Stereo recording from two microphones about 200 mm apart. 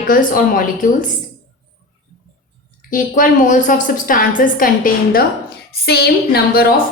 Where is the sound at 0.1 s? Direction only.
45° left (ahead or behind).